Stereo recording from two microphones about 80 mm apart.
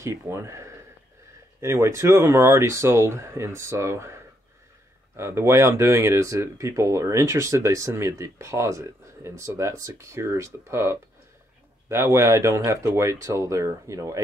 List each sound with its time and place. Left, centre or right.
0.0 s speech: right